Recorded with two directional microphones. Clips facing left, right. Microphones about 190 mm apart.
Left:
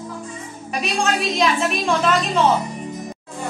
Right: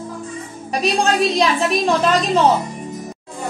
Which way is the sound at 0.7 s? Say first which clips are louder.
Right 4 dB; 35° right (ahead or behind).